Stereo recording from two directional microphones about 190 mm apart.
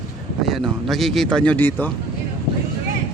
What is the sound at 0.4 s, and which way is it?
Speech, centre (ahead or behind).